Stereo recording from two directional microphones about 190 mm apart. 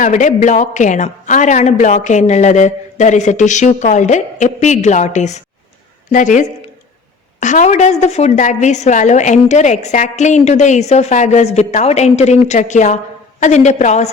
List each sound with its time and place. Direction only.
0.0 s a woman's voice: 40° left (ahead or behind)